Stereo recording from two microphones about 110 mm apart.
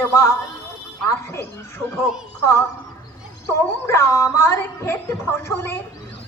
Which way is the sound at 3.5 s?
25° left (ahead or behind).